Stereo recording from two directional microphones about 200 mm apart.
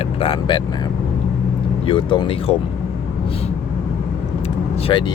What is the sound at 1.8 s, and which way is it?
Speech, 25° left (ahead or behind).